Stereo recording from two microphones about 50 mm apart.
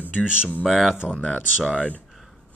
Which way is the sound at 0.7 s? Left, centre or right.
Centre.